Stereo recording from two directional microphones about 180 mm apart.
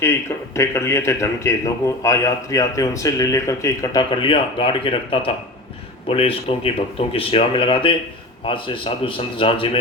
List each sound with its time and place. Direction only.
0.0 s a man's voice: 15° left (ahead or behind); by 9.7 s 30° left (ahead or behind)